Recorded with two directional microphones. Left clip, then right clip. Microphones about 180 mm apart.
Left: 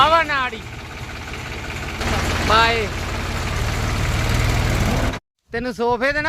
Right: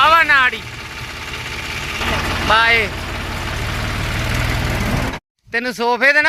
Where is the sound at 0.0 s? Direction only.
10° left (ahead or behind).